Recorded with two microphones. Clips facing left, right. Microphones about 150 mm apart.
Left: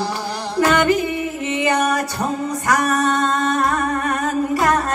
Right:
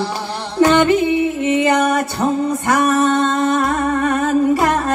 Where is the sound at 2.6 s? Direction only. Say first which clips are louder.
Right 3 dB; 25° right (ahead or behind).